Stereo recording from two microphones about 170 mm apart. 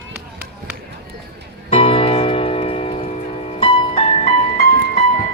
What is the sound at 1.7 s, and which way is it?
Music, 35° left (ahead or behind).